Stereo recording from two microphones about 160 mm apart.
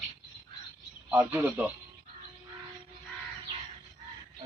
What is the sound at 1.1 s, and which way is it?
Speech, 15° right (ahead or behind).